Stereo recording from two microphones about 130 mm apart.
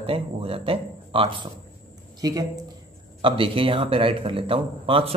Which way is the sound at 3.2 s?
40° right (ahead or behind).